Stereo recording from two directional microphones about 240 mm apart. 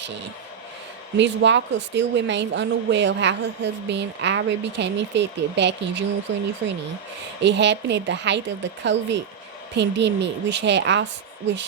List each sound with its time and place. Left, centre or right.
1.1 s a woman's voice: right